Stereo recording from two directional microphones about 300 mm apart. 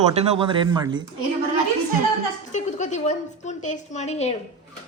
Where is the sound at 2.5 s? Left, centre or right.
Left.